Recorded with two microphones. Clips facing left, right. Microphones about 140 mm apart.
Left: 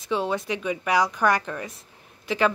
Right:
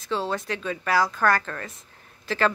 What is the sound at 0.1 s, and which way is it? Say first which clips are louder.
Speech: left 2 dB; 15° left (ahead or behind).